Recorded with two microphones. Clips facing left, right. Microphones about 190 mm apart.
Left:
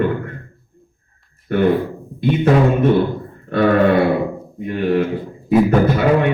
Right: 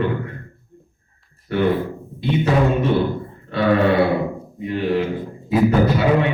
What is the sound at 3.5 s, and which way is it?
Speech, 50° left (ahead or behind).